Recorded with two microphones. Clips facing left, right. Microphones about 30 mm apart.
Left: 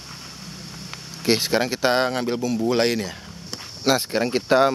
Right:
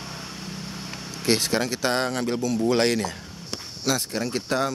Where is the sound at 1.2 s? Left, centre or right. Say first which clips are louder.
Left 3 dB; centre.